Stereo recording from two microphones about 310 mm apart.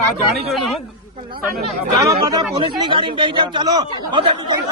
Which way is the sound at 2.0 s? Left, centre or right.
Centre.